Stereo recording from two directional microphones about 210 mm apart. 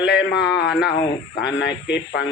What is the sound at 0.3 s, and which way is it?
A man's voice, 50° left (ahead or behind).